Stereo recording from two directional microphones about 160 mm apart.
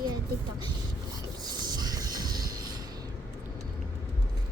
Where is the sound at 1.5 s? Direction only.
25° right (ahead or behind).